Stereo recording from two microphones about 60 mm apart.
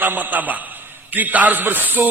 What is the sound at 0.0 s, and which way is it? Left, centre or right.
A man's voice, right.